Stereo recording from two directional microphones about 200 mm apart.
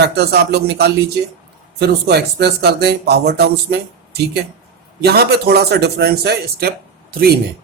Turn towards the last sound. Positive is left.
turn(degrees=-50)  # may be behind; listen again after turning